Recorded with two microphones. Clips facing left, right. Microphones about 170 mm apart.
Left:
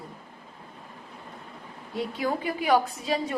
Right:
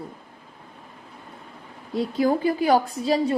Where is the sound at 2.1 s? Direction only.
35° right (ahead or behind).